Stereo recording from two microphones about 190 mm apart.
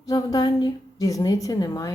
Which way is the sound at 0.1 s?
20° left (ahead or behind).